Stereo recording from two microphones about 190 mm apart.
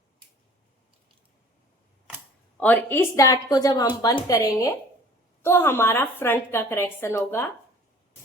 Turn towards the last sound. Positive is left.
turn(degrees=15)  # may be behind; listen again after turning